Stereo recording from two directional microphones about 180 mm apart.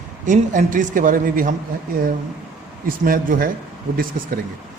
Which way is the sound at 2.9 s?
50° right (ahead or behind).